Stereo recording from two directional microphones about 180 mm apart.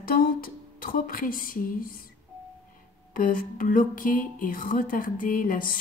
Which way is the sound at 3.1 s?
50° left (ahead or behind).